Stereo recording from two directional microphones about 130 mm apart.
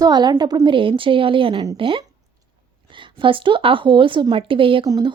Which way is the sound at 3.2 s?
40° right (ahead or behind).